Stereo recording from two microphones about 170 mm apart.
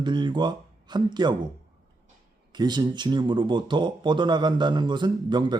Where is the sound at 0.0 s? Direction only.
25° right (ahead or behind).